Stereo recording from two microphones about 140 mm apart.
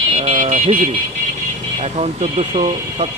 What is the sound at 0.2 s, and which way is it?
Vehicle, 55° right (ahead or behind).